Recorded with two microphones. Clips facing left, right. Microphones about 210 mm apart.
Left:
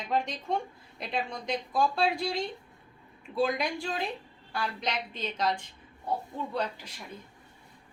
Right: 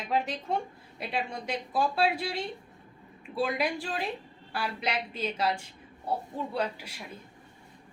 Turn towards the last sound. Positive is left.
turn(degrees=-10)  # may be behind; listen again after turning